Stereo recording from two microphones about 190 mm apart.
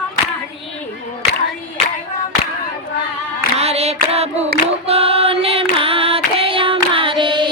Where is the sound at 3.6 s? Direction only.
35° right (ahead or behind).